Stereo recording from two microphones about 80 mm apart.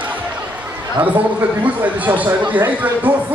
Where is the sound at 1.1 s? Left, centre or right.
Centre.